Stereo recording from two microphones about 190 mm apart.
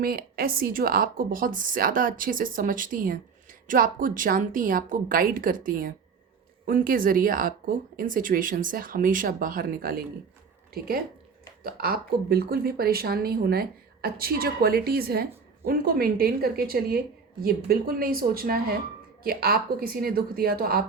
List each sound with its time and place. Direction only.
0.0 s speech: 50° right (ahead or behind)